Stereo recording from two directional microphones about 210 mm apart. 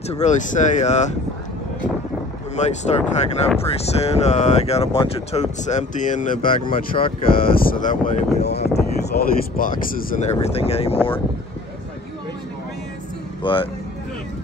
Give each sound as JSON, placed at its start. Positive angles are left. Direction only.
{"t": 0.1, "sound": "speech", "side_deg": 35}
{"t": 2.5, "sound": "speech", "side_deg": 35}
{"t": 10.4, "sound": "speech", "side_deg": 30}
{"t": 13.4, "sound": "speech", "side_deg": 25}